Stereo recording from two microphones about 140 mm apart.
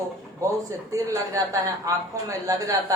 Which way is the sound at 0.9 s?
25° right (ahead or behind).